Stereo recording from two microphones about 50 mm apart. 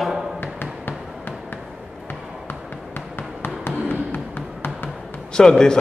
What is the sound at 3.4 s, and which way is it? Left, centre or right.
Music, left.